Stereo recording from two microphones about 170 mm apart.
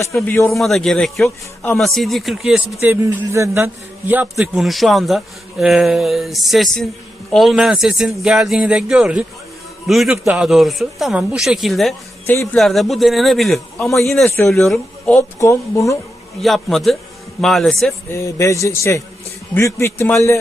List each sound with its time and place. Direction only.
0.1 s a man's voice: centre (ahead or behind)
12.2 s speech: 15° left (ahead or behind)
12.5 s a man's voice: centre (ahead or behind)
14.3 s a man's voice: 15° left (ahead or behind)
14.5 s speech: centre (ahead or behind)
15.1 s a man's voice: 20° left (ahead or behind)
16.4 s a man's voice: centre (ahead or behind)
18.1 s a man's voice: 20° left (ahead or behind)